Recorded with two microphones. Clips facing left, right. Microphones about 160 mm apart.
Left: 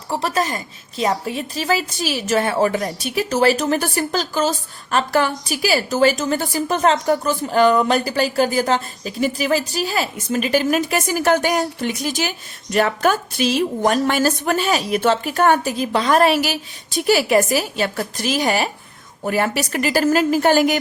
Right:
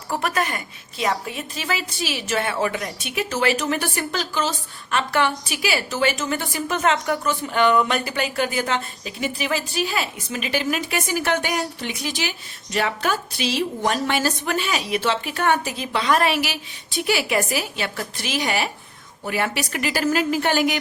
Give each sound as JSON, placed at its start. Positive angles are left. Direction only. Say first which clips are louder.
{"t": 0.1, "sound": "a woman's voice", "louder": "left 3 dB", "side_deg": 35}